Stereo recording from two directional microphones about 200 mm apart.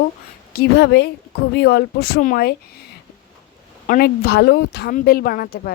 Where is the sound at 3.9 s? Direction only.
50° left (ahead or behind).